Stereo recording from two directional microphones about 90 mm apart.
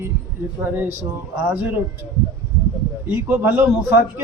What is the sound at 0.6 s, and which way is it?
Speech, 20° right (ahead or behind).